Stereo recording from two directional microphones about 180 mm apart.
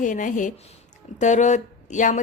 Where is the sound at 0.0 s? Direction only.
45° left (ahead or behind).